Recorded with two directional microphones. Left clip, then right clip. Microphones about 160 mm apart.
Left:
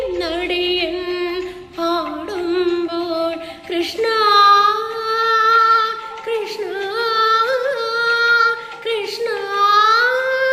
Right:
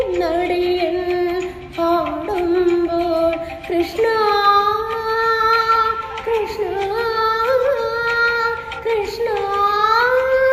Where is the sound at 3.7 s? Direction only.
15° left (ahead or behind).